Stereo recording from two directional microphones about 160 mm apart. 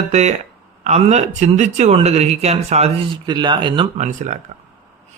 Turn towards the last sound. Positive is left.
turn(degrees=-50)  # may be behind; listen again after turning